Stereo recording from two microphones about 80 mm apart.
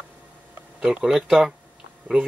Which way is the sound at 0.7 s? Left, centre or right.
Centre.